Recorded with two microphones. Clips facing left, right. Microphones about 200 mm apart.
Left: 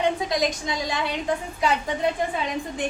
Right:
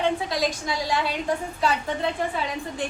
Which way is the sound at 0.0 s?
20° left (ahead or behind).